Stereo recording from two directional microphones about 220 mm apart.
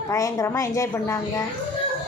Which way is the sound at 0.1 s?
15° left (ahead or behind).